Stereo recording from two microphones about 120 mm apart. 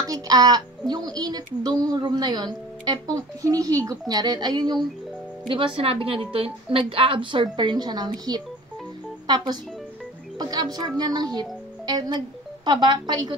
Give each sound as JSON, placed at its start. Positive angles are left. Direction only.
{"t": 0.0, "sound": "speech", "side_deg": -30}
{"t": 5.5, "sound": "a woman's voice", "side_deg": -45}